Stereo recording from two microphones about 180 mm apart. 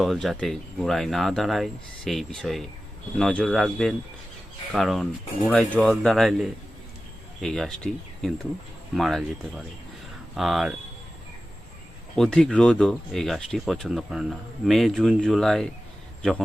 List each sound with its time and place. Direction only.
0.0 s speech: centre (ahead or behind)
10.3 s speech: centre (ahead or behind)
12.1 s speech: 5° left (ahead or behind)